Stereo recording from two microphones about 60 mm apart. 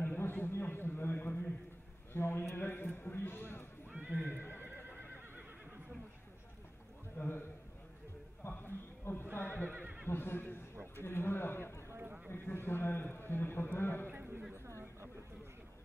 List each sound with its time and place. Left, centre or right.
0.0 s a sound: left
2.1 s a man's voice: left
4.0 s speech: right
4.3 s speech: left
7.2 s a sound: left
8.5 s neigh: left
9.7 s neigh: right
10.0 s speech: left
11.0 s a sound: left